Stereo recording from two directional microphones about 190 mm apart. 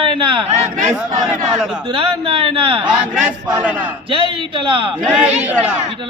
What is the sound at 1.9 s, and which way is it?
A man's voice, 30° right (ahead or behind).